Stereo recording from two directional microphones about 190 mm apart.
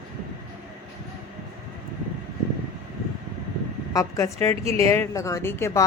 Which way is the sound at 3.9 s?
20° left (ahead or behind).